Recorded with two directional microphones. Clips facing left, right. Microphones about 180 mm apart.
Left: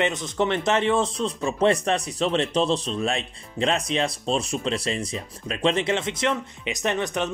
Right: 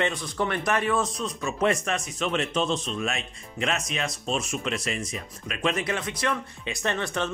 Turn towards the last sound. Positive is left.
turn(degrees=15)  # may be behind; listen again after turning